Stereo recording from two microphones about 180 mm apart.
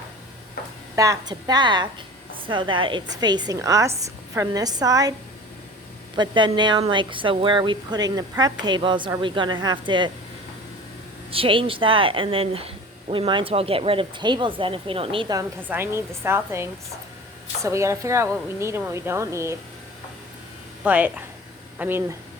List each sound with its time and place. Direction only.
0.9 s speech: 20° right (ahead or behind)
6.1 s speech: 25° right (ahead or behind)
11.3 s speech: 30° right (ahead or behind)
15.7 s a woman's voice: 15° right (ahead or behind)
20.8 s a woman's voice: 10° right (ahead or behind)